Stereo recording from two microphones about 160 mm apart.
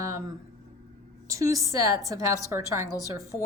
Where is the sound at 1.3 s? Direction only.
20° right (ahead or behind).